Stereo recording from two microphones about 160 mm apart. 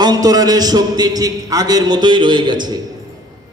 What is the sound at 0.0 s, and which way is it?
A man's voice, 25° right (ahead or behind).